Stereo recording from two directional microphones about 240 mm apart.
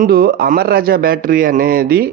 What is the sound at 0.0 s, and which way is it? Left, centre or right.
Speech, right.